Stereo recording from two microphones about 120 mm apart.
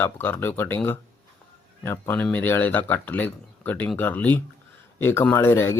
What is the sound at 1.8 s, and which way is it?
Speech, 20° left (ahead or behind).